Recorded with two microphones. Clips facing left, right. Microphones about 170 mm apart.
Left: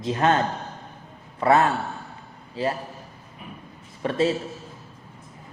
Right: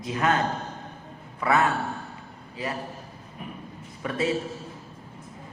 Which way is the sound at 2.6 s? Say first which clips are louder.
Left 7 dB; 30° left (ahead or behind).